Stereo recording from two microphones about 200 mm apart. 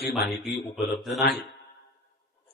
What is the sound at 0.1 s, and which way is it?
Speech, centre (ahead or behind).